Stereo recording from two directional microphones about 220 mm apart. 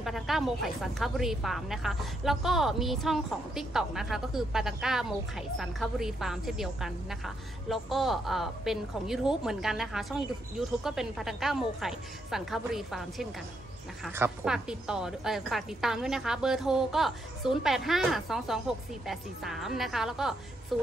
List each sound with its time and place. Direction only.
0.0 s speech: centre (ahead or behind)